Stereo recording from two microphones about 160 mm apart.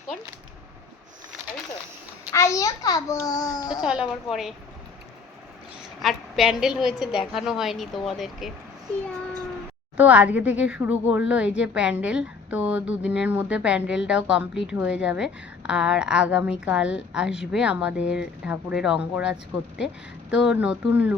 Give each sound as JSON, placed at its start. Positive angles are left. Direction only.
{"t": 1.4, "sound": "a sound", "side_deg": -45}
{"t": 2.3, "sound": "a child's voice", "side_deg": 20}
{"t": 3.8, "sound": "a woman's voice", "side_deg": -5}
{"t": 6.0, "sound": "a woman's voice", "side_deg": 0}
{"t": 10.0, "sound": "a woman's voice", "side_deg": -10}